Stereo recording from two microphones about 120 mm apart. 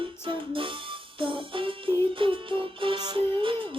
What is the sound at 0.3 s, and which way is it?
Music, 45° right (ahead or behind).